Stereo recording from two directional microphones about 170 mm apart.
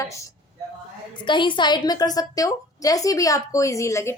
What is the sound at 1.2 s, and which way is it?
A woman's voice, 30° left (ahead or behind).